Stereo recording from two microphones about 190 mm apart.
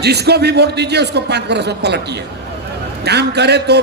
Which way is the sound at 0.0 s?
60° right (ahead or behind).